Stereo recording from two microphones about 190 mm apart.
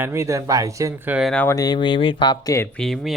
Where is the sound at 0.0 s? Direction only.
15° right (ahead or behind).